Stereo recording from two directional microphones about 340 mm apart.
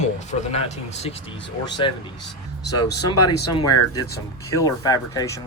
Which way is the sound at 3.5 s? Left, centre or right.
Centre.